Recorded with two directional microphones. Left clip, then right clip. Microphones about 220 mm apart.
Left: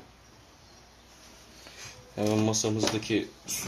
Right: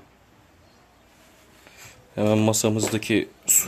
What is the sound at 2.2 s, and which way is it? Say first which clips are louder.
Speech: right 6 dB; 40° right (ahead or behind).